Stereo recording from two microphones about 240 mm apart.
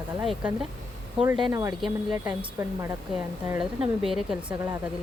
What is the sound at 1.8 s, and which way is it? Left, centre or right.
A woman's voice, centre.